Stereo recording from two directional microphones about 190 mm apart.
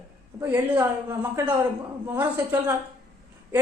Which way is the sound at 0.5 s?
10° right (ahead or behind).